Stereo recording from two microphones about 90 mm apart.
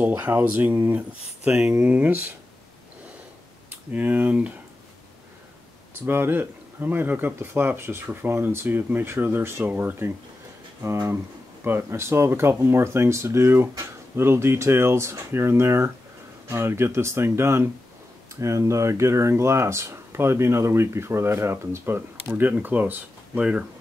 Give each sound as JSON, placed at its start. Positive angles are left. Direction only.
{"t": 0.2, "sound": "speech", "side_deg": -20}
{"t": 1.4, "sound": "speech", "side_deg": -10}
{"t": 3.9, "sound": "speech", "side_deg": -15}
{"t": 6.0, "sound": "speech", "side_deg": -25}